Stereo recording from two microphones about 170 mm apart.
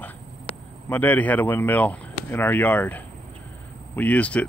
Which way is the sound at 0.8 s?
10° left (ahead or behind).